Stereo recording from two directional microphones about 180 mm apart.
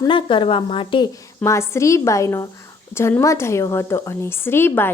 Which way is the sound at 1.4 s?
15° left (ahead or behind).